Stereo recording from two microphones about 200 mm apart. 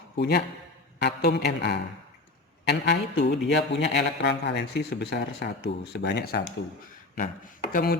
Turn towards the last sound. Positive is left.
turn(degrees=50)  # may be behind; listen again after turning